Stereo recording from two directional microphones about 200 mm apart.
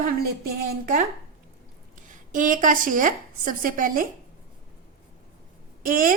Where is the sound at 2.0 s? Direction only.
40° right (ahead or behind).